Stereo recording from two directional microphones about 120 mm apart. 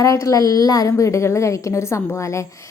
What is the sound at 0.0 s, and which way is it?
A woman's voice, 30° left (ahead or behind).